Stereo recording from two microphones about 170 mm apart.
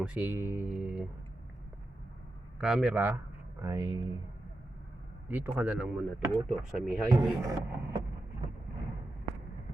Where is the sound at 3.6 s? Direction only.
20° right (ahead or behind).